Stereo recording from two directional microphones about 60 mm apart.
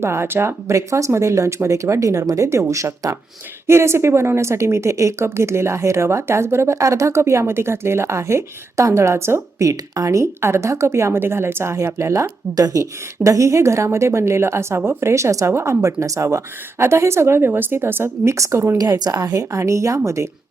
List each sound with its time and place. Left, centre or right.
0.0 s speech: right
0.7 s speech: right
3.7 s speech: right
9.6 s speech: right
11.2 s speech: right
12.5 s speech: right
15.1 s speech: right
15.5 s speech: right
16.0 s speech: right
18.3 s speech: right
18.8 s speech: right